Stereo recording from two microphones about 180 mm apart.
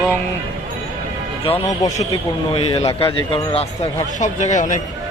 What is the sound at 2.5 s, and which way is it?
Speech, 35° left (ahead or behind).